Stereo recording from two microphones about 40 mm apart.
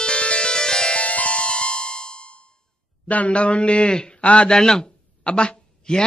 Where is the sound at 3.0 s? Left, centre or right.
Left.